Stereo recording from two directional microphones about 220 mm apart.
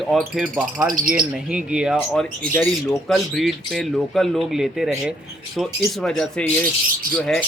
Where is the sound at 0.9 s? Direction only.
40° right (ahead or behind).